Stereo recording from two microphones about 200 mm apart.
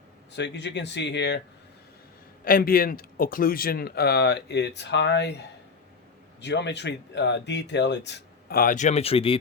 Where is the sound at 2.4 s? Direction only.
45° left (ahead or behind).